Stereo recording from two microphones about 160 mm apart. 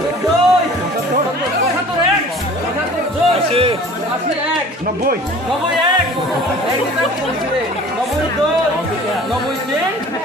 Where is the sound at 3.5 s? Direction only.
35° right (ahead or behind).